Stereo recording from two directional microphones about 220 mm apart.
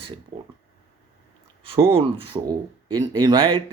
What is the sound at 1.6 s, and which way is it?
Speech, 25° right (ahead or behind).